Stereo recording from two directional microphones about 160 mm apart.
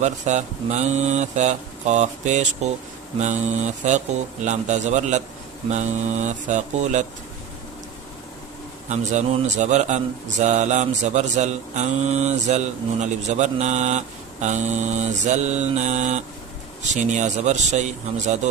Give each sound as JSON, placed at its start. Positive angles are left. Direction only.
{"t": 0.0, "sound": "speech", "side_deg": -50}
{"t": 8.9, "sound": "speech", "side_deg": -45}